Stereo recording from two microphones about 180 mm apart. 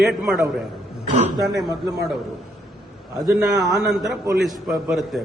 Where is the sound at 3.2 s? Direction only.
Centre (ahead or behind).